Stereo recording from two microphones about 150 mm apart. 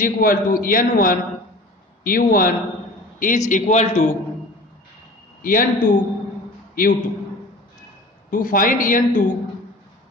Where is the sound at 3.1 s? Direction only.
60° left (ahead or behind).